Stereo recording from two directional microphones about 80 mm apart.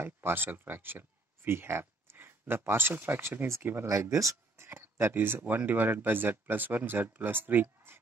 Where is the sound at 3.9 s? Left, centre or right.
Right.